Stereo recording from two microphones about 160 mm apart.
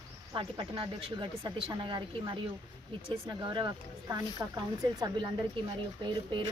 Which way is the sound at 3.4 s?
30° right (ahead or behind).